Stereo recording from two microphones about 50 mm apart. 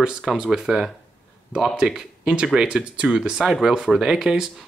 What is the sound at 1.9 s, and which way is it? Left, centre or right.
Speech, centre.